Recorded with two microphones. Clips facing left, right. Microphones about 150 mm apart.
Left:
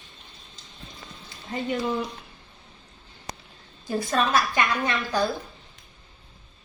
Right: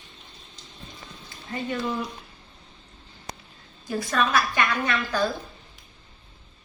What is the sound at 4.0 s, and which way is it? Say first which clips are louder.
A woman's voice: even; 25° left (ahead or behind).